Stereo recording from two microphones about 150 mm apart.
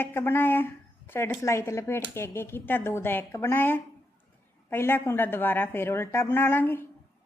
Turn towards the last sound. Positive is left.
turn(degrees=15)  # may be behind; listen again after turning